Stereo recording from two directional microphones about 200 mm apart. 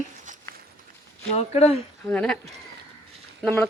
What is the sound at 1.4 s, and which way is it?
Speech, 30° left (ahead or behind).